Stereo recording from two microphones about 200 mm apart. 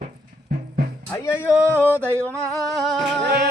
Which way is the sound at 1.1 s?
15° left (ahead or behind).